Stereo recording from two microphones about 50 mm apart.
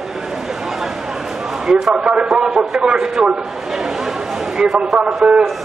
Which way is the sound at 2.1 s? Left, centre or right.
Centre.